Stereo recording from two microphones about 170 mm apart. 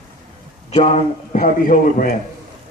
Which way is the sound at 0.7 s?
35° left (ahead or behind).